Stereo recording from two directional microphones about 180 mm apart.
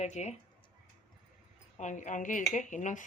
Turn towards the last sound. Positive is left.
turn(degrees=45)  # may be behind; listen again after turning